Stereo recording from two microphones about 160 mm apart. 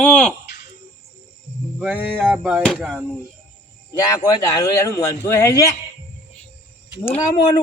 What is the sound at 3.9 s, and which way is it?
A man's voice, 25° left (ahead or behind).